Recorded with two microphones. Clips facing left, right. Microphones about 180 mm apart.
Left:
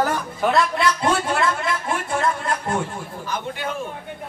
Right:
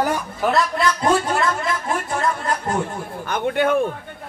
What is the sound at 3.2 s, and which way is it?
Speech, 60° right (ahead or behind).